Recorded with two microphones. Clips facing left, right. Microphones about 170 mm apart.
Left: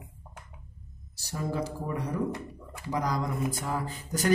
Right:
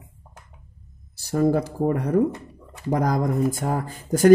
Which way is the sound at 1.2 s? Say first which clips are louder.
Right 11 dB; 55° right (ahead or behind).